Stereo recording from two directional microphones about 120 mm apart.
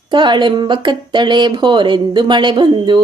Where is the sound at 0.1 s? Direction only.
40° right (ahead or behind).